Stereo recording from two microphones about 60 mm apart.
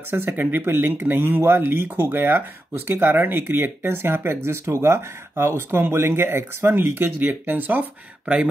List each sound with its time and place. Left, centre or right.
0.4 s speech: right